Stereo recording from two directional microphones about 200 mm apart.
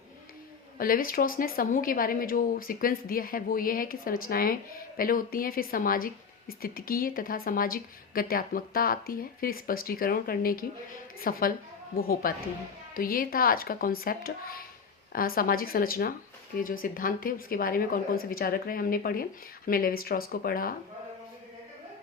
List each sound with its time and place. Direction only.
0.8 s speech: 45° left (ahead or behind)